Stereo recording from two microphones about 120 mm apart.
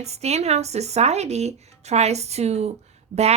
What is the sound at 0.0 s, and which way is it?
Speech, 65° right (ahead or behind).